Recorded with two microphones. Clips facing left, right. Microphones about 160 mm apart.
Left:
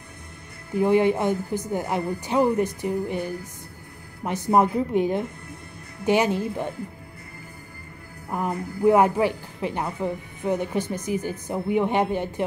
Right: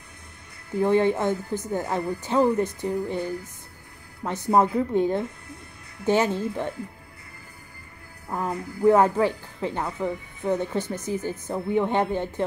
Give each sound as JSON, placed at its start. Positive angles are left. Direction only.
{"t": 0.7, "sound": "speech", "side_deg": 15}
{"t": 4.5, "sound": "speech", "side_deg": 15}
{"t": 8.3, "sound": "speech", "side_deg": 15}